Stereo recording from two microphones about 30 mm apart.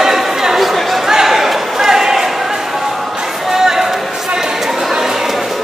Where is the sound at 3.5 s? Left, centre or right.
Centre.